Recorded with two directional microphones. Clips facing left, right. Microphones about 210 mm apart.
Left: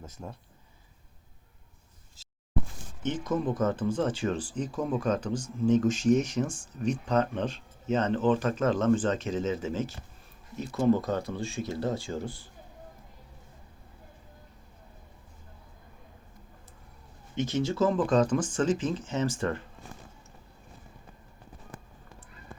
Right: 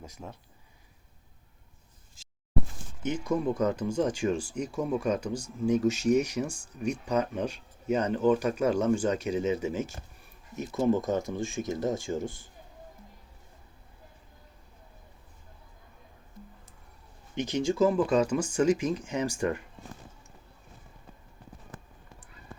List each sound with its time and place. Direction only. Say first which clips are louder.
0.0 s speech: left 1 dB; 10° right (ahead or behind)
3.0 s speech: right 1 dB; 10° right (ahead or behind)
17.3 s speech: right 1 dB; 15° right (ahead or behind)